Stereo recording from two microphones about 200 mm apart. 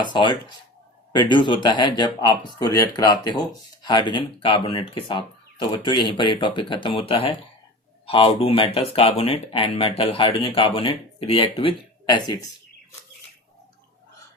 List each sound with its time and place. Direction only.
0.0 s speech: 25° left (ahead or behind)